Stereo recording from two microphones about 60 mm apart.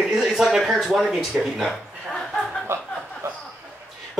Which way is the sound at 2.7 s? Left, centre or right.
Right.